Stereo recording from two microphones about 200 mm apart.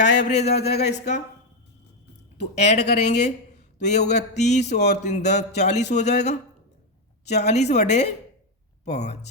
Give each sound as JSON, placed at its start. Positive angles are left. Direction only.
{"t": 0.0, "sound": "speech", "side_deg": 35}
{"t": 2.4, "sound": "speech", "side_deg": 35}